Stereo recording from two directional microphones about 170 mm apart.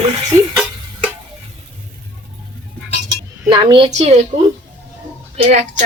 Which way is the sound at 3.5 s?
30° right (ahead or behind).